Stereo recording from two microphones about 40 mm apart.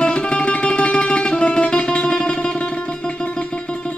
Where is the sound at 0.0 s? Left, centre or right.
Left.